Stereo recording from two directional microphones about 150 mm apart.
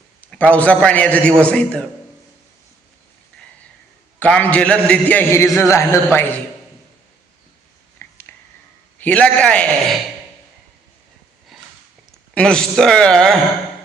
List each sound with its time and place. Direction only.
0.2 s a man's voice: 10° left (ahead or behind)
4.2 s a man's voice: 10° left (ahead or behind)
7.9 s a sound: 15° left (ahead or behind)
9.0 s a man's voice: 10° left (ahead or behind)
11.5 s sniff: centre (ahead or behind)
12.3 s speech: 5° left (ahead or behind)